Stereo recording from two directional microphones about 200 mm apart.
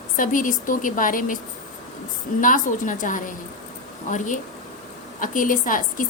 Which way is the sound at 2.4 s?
40° left (ahead or behind).